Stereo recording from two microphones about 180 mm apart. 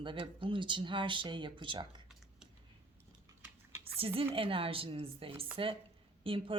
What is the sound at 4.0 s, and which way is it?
A woman's voice, 30° right (ahead or behind).